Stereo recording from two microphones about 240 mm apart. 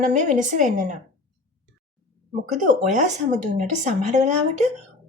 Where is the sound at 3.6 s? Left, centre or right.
Right.